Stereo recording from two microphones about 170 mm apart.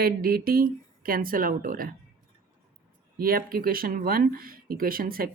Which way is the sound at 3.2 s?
60° right (ahead or behind).